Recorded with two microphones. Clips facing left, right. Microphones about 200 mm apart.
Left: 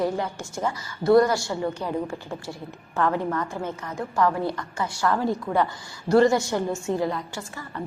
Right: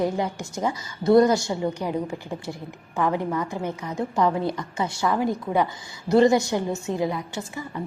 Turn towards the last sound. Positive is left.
turn(degrees=-15)  # may be behind; listen again after turning